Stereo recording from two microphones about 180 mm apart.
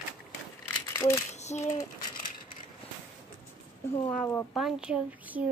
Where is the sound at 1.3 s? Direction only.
40° left (ahead or behind).